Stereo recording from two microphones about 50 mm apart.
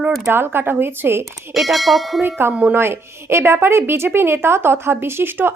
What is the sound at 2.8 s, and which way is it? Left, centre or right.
Speech, right.